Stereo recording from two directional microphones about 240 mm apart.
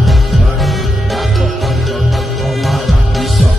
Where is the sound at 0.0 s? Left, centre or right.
Centre.